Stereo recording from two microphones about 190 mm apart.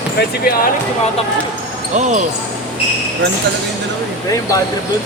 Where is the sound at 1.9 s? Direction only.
40° right (ahead or behind).